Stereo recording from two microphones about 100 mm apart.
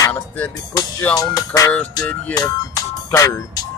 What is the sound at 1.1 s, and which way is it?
Speech, 35° left (ahead or behind).